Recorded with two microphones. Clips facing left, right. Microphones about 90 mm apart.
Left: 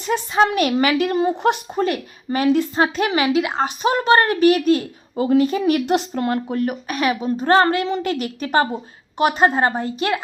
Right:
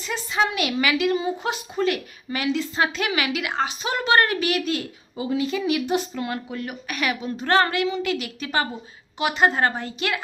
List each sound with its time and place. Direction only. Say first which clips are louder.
0.0 s a woman's voice: left 6 dB; 50° left (ahead or behind)
1.8 s a woman's voice: right 2 dB; 40° left (ahead or behind)
5.8 s speech: left 4 dB; 75° left (ahead or behind)
6.1 s a woman's voice: left 8 dB; 45° left (ahead or behind)
9.4 s a woman's voice: right 1 dB; 30° left (ahead or behind)